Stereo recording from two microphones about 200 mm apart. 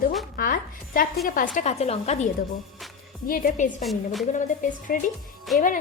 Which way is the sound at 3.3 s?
45° left (ahead or behind).